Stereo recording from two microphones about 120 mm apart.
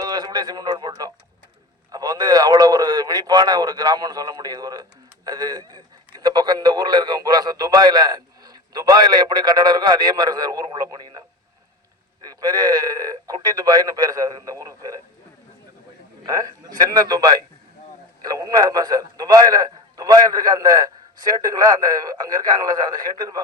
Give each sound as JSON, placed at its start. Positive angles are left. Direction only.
{"t": 0.0, "sound": "a man's voice", "side_deg": -35}
{"t": 12.2, "sound": "a man's voice", "side_deg": -35}
{"t": 16.2, "sound": "a man's voice", "side_deg": -30}